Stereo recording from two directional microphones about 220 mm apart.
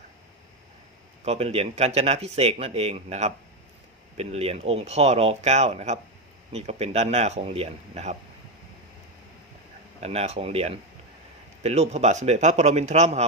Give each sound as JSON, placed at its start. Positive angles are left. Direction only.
{"t": 1.2, "sound": "speech", "side_deg": -30}
{"t": 10.0, "sound": "a man's voice", "side_deg": -30}